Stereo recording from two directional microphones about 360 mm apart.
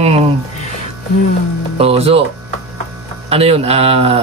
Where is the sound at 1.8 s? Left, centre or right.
Centre.